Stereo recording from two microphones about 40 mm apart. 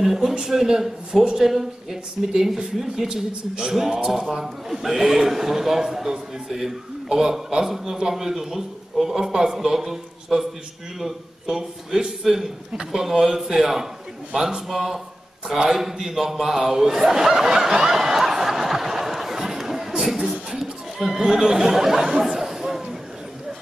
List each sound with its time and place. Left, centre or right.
0.0 s a man's voice: centre